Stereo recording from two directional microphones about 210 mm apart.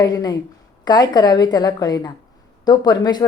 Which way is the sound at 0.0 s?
20° left (ahead or behind).